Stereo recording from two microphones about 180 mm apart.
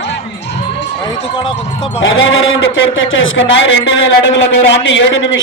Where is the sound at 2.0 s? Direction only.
90° left.